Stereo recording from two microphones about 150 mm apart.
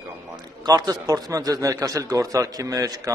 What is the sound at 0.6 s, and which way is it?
A man's voice, 25° right (ahead or behind).